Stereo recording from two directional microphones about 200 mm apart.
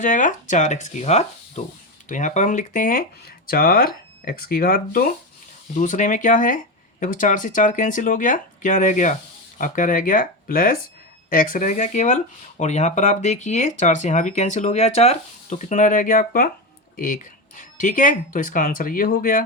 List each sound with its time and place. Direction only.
0.0 s speech: 40° left (ahead or behind)